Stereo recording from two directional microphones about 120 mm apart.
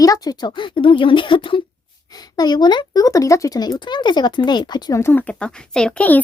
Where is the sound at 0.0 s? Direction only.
30° left (ahead or behind).